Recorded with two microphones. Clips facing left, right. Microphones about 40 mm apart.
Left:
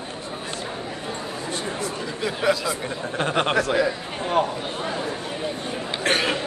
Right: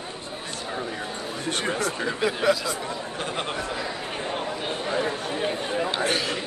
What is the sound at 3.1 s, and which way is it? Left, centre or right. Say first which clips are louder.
Speech: left 10 dB; left.